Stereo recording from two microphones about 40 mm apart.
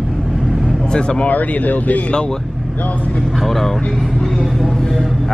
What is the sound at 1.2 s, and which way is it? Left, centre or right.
Speech, left.